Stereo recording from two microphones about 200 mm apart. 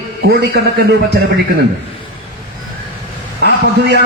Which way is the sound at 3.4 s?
60° right (ahead or behind).